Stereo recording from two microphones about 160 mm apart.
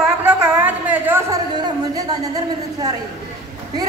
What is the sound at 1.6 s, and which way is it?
A woman's voice, 25° right (ahead or behind).